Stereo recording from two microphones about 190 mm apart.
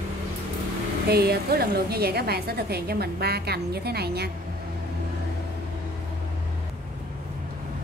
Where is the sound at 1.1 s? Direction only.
55° right (ahead or behind).